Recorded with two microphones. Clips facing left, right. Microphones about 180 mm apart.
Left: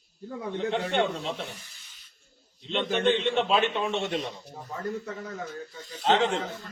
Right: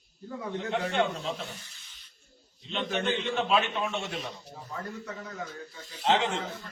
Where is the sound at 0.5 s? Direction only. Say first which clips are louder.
Left 2 dB; 30° left (ahead or behind).